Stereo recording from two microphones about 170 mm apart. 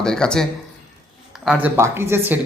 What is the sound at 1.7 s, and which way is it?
Speech, 15° right (ahead or behind).